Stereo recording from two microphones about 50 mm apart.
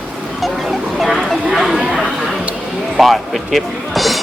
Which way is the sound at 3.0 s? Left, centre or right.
Centre.